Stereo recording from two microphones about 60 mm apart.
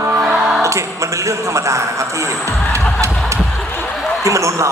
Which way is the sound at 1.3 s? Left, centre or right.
Right.